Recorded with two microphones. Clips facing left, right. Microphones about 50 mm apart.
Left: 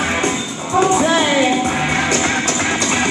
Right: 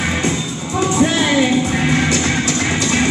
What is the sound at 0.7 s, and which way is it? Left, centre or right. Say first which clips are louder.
Music: left 3 dB; left.